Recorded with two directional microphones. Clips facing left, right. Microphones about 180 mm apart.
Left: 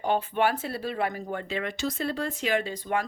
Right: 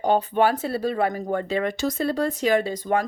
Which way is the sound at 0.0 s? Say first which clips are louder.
Right 5 dB; 35° right (ahead or behind).